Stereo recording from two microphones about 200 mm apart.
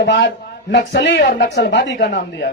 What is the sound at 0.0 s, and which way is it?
Speech, 60° left (ahead or behind).